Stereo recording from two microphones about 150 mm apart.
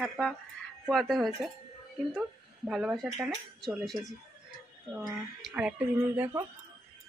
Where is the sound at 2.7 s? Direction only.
Centre (ahead or behind).